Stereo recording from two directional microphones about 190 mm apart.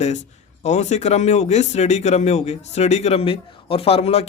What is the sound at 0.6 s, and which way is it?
Speech, 35° left (ahead or behind).